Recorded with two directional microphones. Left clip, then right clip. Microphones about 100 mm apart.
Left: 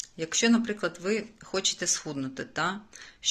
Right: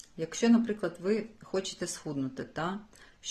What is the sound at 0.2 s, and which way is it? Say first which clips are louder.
Speech: left 2 dB; 30° right (ahead or behind).